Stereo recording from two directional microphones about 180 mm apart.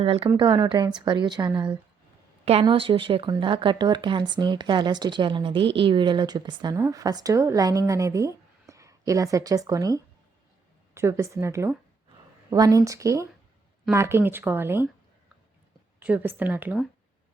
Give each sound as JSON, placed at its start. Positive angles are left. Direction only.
{"t": 0.0, "sound": "a woman's voice", "side_deg": -30}
{"t": 16.0, "sound": "speech", "side_deg": -10}